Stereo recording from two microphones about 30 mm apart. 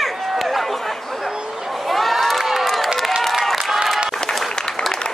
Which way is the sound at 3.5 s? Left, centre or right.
Centre.